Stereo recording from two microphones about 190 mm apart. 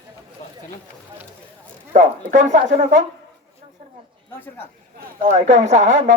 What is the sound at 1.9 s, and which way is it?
Speech, 40° right (ahead or behind).